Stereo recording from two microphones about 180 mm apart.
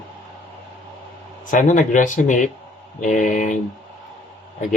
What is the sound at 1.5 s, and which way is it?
Speech, 45° left (ahead or behind).